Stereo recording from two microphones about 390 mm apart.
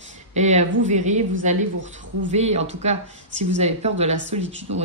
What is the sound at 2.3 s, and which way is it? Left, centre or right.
Speech, centre.